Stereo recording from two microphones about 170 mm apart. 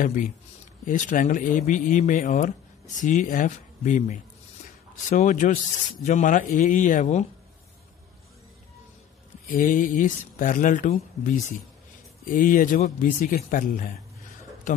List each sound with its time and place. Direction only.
0.0 s speech: 50° left (ahead or behind)
9.6 s speech: 50° left (ahead or behind)